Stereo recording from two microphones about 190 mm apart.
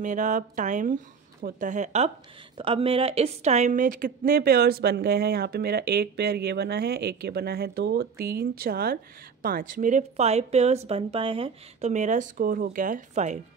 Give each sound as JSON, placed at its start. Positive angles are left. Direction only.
{"t": 0.0, "sound": "a woman's voice", "side_deg": -40}